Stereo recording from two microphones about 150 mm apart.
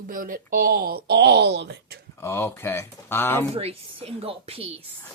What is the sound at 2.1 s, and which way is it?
Speech, 15° left (ahead or behind).